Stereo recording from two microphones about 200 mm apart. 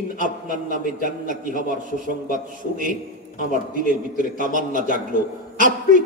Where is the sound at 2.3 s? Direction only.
40° right (ahead or behind).